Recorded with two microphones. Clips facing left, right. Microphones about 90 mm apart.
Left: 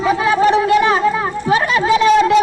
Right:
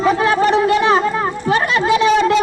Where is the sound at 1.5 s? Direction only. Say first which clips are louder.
Left 1 dB; centre (ahead or behind).